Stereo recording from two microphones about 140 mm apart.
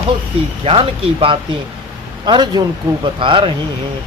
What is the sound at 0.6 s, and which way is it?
Speech, 45° right (ahead or behind).